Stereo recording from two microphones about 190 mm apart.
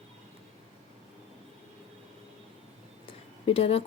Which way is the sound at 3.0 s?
30° left (ahead or behind).